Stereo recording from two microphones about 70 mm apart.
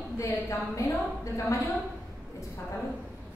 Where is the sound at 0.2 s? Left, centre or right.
Left.